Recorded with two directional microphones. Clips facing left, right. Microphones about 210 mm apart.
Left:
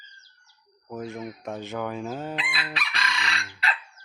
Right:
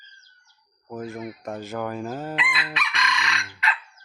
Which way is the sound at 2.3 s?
35° left (ahead or behind).